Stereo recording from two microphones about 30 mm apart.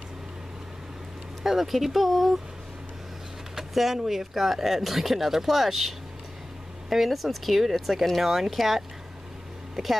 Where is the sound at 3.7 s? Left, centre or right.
Centre.